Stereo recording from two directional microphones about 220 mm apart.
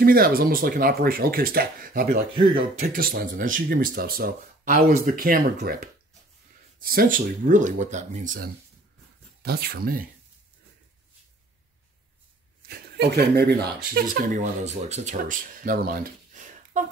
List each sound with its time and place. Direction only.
0.0 s speech: 40° right (ahead or behind)
12.6 s speech: 45° right (ahead or behind)